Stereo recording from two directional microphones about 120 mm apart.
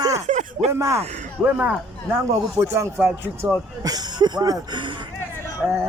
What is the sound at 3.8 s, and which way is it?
Speech, 35° right (ahead or behind).